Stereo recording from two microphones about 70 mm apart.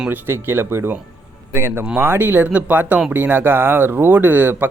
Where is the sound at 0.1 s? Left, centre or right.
Right.